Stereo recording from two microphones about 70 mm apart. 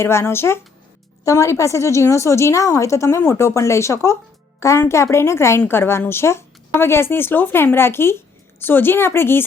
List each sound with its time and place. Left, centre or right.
0.0 s a woman's voice: left